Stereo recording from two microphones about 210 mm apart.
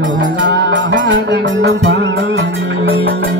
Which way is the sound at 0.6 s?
60° right (ahead or behind).